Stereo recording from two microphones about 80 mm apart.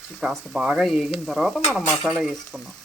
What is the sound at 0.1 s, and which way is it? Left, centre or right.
Speech, centre.